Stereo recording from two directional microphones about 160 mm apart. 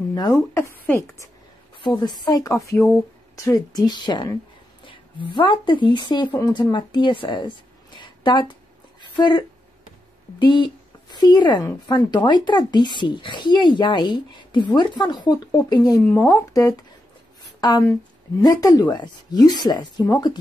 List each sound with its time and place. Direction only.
0.1 s a woman's voice: 20° left (ahead or behind)
1.8 s speech: 30° left (ahead or behind)
8.0 s a sound: 30° left (ahead or behind)
9.0 s speech: 30° left (ahead or behind)